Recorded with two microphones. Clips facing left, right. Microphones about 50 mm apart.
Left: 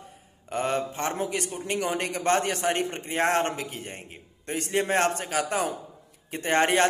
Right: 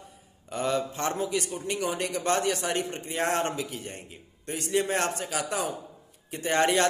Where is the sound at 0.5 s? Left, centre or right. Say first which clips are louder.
Left 1 dB; left.